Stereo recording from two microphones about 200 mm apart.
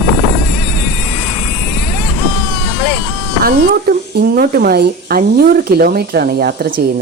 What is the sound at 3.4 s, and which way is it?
Speech, 50° right (ahead or behind).